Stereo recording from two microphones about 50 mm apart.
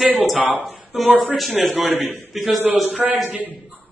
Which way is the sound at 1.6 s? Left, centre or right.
Centre.